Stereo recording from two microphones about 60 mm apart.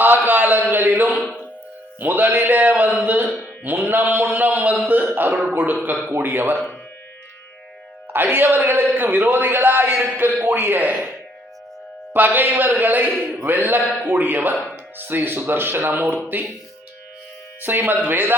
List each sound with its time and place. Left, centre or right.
0.3 s a sound: right
2.0 s a man's voice: right
8.1 s a man's voice: right
12.1 s a man's voice: right
17.6 s a man's voice: right